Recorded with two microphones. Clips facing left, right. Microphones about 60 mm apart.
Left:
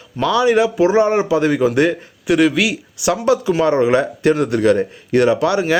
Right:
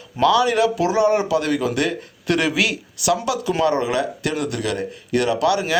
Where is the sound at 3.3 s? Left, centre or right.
Left.